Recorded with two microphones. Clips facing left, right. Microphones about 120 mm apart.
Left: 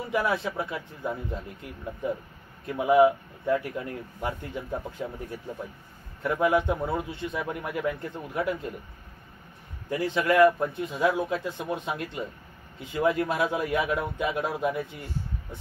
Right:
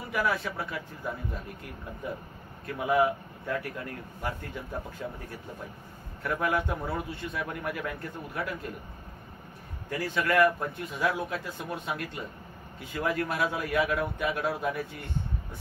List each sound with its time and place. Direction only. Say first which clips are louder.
0.1 s a man's voice: left 2 dB; 20° left (ahead or behind)
6.2 s a man's voice: left 5 dB; 20° left (ahead or behind)
9.8 s a man's voice: left 4 dB; 20° left (ahead or behind)